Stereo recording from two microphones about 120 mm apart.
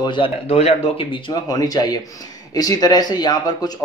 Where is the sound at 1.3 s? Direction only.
35° left (ahead or behind).